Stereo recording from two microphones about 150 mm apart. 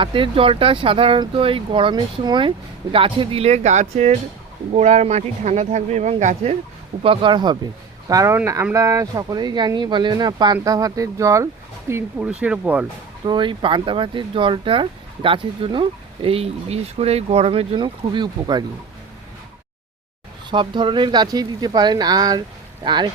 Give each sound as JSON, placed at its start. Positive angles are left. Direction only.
{"t": 0.0, "sound": "speech", "side_deg": -35}
{"t": 7.0, "sound": "speech", "side_deg": -35}
{"t": 13.2, "sound": "speech", "side_deg": -30}
{"t": 20.5, "sound": "speech", "side_deg": -30}